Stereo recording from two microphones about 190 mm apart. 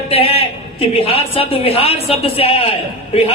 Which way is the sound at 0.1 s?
30° left (ahead or behind).